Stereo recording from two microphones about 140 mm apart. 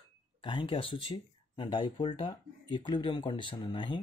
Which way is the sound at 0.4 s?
35° left (ahead or behind).